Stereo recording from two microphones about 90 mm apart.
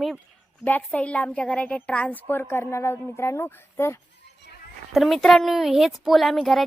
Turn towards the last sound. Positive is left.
turn(degrees=0)  # may be behind; listen again after turning